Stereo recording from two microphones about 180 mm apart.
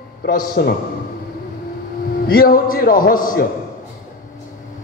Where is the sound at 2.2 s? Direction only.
55° left (ahead or behind).